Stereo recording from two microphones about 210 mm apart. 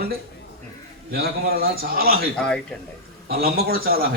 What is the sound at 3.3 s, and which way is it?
Speech, 45° right (ahead or behind).